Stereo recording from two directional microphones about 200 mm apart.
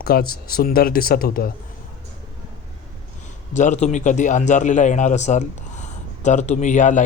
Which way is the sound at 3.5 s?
35° left (ahead or behind).